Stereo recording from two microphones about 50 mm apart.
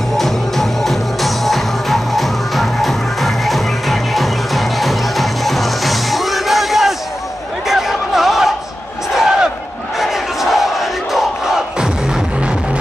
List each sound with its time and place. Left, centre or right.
0.2 s music: centre
7.6 s a sound: centre
9.1 s crowd: centre